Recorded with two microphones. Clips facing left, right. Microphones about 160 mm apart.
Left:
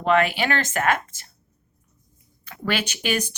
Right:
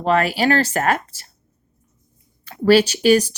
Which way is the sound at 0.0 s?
35° right (ahead or behind).